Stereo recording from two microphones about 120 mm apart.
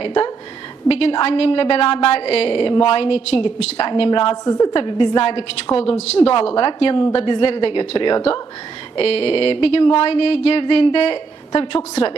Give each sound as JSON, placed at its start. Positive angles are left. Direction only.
{"t": 0.0, "sound": "a woman's voice", "side_deg": 50}
{"t": 4.4, "sound": "a woman's voice", "side_deg": 30}
{"t": 4.7, "sound": "a woman's voice", "side_deg": 45}